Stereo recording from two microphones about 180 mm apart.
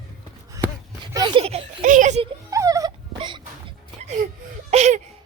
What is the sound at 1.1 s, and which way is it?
A child's voice, 25° right (ahead or behind).